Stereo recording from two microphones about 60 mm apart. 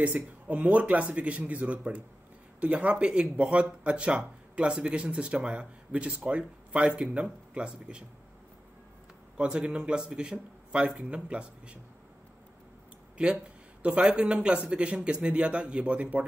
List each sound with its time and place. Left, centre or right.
0.0 s speech: right
9.4 s speech: centre
13.8 s speech: right